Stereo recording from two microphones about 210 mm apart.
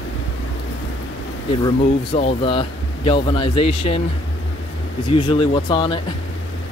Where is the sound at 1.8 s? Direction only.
30° left (ahead or behind).